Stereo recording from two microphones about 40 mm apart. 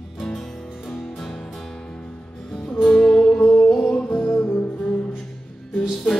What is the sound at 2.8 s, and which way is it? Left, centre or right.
Music, centre.